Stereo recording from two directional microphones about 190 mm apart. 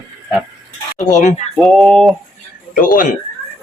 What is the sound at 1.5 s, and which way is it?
Livestock, centre (ahead or behind).